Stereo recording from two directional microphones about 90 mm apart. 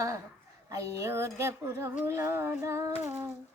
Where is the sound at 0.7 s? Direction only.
35° right (ahead or behind).